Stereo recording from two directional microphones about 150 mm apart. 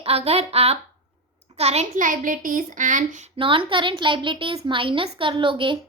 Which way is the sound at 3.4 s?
35° right (ahead or behind).